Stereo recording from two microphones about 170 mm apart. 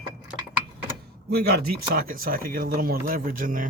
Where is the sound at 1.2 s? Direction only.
70° right (ahead or behind).